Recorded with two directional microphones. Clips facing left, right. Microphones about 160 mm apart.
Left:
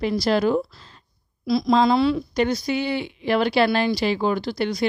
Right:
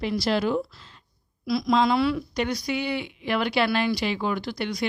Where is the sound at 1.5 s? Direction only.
30° left (ahead or behind).